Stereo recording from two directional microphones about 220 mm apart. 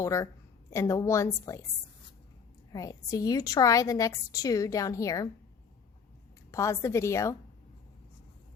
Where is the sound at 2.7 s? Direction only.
15° left (ahead or behind).